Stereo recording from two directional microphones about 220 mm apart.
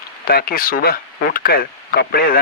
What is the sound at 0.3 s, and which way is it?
Speech, 45° left (ahead or behind).